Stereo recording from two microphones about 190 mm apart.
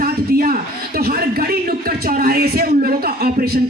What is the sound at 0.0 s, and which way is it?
A man's voice, 50° right (ahead or behind).